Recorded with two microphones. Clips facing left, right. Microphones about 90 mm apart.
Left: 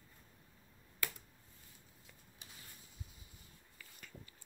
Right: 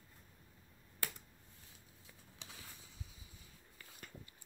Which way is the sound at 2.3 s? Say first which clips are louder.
Right 4 dB; 90° right.